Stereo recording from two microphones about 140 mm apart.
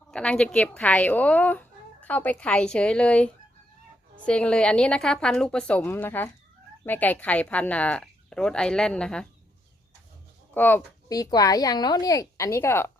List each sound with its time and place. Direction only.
0.1 s speech: 5° left (ahead or behind)
10.5 s speech: 15° left (ahead or behind)
11.1 s a woman's voice: 25° left (ahead or behind)